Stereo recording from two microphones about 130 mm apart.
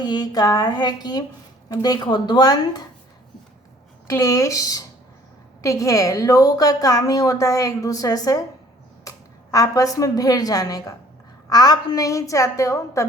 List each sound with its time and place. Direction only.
0.0 s speech: 30° left (ahead or behind)
4.0 s a woman's voice: 25° left (ahead or behind)